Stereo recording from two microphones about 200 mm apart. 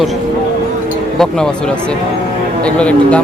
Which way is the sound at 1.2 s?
5° left (ahead or behind).